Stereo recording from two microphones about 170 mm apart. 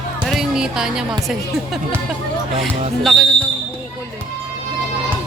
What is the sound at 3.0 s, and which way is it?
Speech, centre (ahead or behind).